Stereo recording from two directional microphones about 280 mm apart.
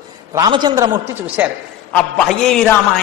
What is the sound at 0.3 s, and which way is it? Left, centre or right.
A man's voice, centre.